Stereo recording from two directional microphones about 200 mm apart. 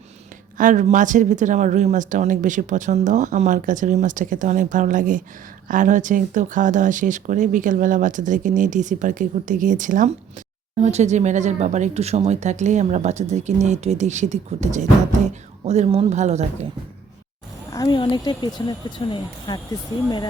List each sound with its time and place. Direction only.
0.5 s speech: 40° right (ahead or behind)
17.7 s speech: 20° left (ahead or behind)